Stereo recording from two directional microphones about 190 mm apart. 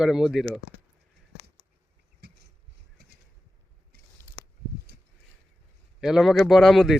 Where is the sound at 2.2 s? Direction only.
60° right (ahead or behind).